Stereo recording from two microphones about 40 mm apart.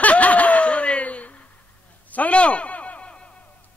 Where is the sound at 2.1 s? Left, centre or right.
Left.